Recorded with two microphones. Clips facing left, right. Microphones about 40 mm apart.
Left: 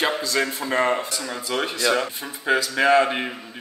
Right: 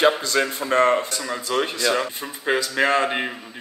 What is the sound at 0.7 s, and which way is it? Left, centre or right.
Speech, right.